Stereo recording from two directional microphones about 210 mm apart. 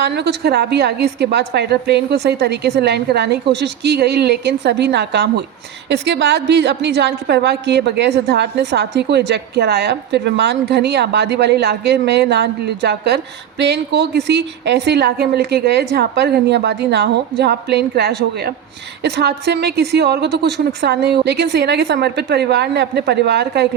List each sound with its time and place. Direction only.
0.0 s a woman's voice: 55° right (ahead or behind)